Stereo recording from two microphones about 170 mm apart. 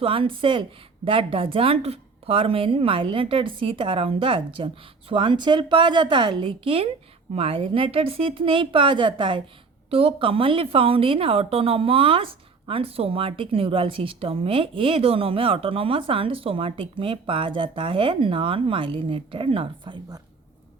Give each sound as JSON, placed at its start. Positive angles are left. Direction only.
{"t": 0.0, "sound": "a woman's voice", "side_deg": -30}